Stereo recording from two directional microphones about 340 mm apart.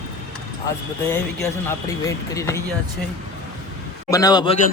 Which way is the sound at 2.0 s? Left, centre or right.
Centre.